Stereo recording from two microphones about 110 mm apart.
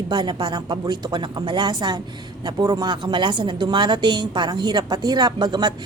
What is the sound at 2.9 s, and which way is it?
A woman's voice, 45° right (ahead or behind).